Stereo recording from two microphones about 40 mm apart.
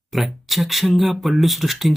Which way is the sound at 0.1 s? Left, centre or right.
Centre.